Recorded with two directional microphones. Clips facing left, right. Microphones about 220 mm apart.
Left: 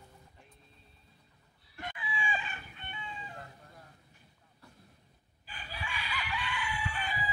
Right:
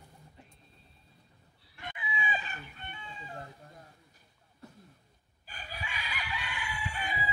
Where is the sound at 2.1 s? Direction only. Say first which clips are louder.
Right 1 dB; 40° right (ahead or behind).